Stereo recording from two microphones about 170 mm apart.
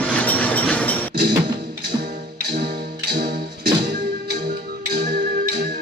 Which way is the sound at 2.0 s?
60° right (ahead or behind).